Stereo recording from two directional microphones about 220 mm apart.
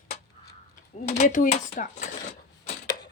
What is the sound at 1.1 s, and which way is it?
Speech, 35° left (ahead or behind).